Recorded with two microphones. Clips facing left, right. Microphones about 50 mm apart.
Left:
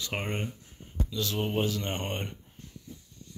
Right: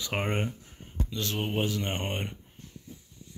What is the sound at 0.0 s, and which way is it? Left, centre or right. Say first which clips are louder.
Speech: right 3 dB; centre.